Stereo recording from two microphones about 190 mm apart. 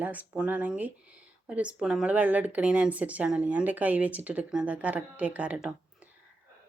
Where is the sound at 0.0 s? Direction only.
10° right (ahead or behind).